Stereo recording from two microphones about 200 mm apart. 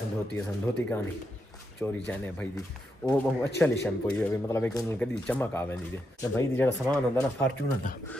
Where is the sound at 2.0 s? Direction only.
10° left (ahead or behind).